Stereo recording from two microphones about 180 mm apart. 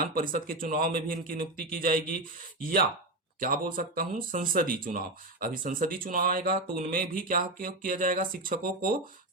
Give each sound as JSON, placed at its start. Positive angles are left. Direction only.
{"t": 0.0, "sound": "speech", "side_deg": -50}
{"t": 3.4, "sound": "speech", "side_deg": -50}